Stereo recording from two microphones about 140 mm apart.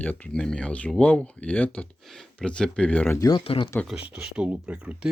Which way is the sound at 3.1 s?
25° left (ahead or behind).